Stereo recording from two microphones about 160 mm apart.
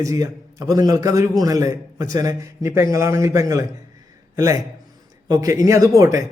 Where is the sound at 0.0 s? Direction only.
20° right (ahead or behind).